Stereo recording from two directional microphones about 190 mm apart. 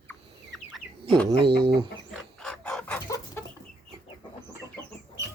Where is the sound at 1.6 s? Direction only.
25° right (ahead or behind).